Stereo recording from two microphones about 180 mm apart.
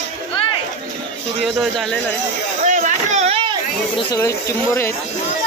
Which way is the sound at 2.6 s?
45° right (ahead or behind).